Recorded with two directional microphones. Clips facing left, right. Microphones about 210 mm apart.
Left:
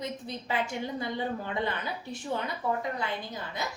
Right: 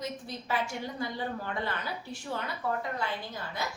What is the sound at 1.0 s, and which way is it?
Speech, 20° left (ahead or behind).